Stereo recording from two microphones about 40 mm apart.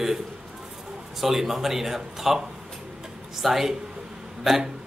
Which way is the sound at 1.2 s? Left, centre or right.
Centre.